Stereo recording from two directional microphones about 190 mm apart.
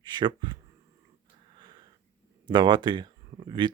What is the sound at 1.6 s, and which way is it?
Sniff, 20° right (ahead or behind).